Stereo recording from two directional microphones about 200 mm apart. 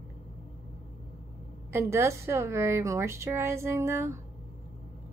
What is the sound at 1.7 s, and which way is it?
A woman's voice, 15° right (ahead or behind).